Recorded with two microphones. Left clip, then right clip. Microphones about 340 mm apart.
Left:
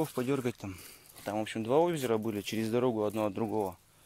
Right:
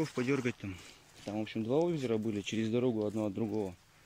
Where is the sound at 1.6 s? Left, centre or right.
Left.